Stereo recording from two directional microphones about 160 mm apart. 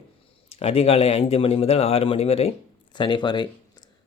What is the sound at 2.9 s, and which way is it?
Speech, 30° left (ahead or behind).